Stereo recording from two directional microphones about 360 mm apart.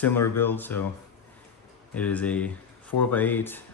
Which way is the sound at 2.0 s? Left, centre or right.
Centre.